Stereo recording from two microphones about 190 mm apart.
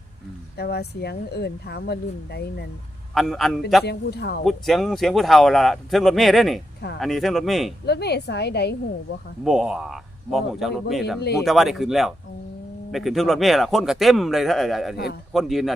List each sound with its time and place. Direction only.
0.5 s speech: 60° left (ahead or behind)
3.2 s speech: centre (ahead or behind)
3.8 s speech: 60° left (ahead or behind)
4.4 s speech: centre (ahead or behind)
7.9 s speech: 60° left (ahead or behind)
9.4 s speech: centre (ahead or behind)